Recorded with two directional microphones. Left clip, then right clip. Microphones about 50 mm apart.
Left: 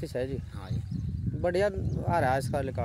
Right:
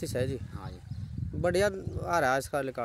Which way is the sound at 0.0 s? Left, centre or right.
Right.